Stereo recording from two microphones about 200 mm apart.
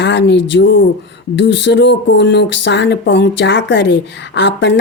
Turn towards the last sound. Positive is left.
turn(degrees=60)  # may be behind; listen again after turning